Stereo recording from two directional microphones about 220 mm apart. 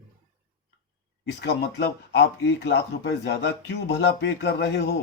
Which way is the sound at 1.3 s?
50° left (ahead or behind).